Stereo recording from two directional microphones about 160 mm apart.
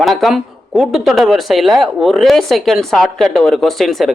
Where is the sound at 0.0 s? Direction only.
Centre (ahead or behind).